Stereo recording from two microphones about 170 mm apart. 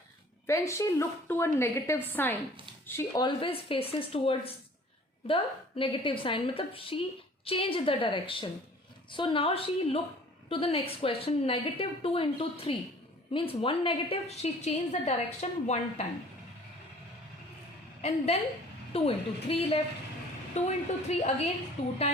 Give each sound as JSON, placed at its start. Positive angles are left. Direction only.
{"t": 0.4, "sound": "a woman's voice", "side_deg": 15}
{"t": 3.2, "sound": "a woman's voice", "side_deg": 30}
{"t": 18.9, "sound": "a woman's voice", "side_deg": 35}